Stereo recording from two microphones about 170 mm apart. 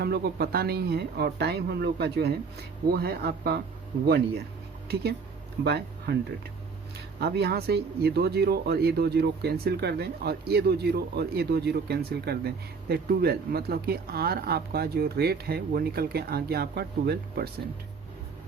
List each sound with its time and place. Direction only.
0.0 s speech: 70° right (ahead or behind)
4.9 s speech: 70° right (ahead or behind)
7.2 s speech: 70° right (ahead or behind)